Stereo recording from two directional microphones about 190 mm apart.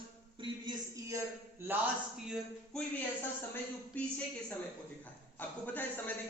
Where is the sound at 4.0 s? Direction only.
5° left (ahead or behind).